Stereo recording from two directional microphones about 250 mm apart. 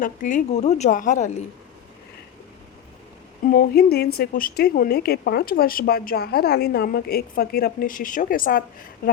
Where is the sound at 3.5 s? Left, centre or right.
Left.